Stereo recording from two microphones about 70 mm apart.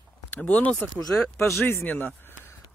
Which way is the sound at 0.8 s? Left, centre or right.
Centre.